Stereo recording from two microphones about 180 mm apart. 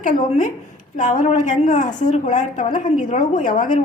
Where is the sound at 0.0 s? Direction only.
45° left (ahead or behind).